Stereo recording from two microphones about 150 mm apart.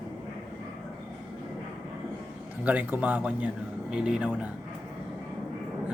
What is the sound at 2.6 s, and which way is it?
Speech, 10° right (ahead or behind).